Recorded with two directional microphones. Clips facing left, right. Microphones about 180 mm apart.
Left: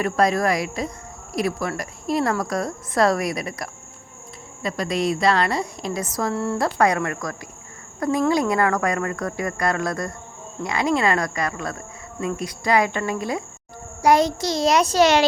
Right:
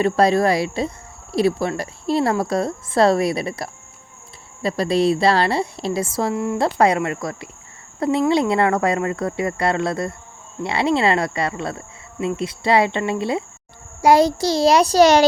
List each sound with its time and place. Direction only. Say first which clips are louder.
0.0 s a woman's voice: right 4 dB; 30° right (ahead or behind)
6.3 s a woman's voice: right 2 dB; 15° right (ahead or behind)
6.6 s a woman's voice: right 3 dB; 25° right (ahead or behind)